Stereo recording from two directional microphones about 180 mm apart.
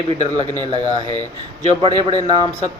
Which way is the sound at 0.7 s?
35° left (ahead or behind).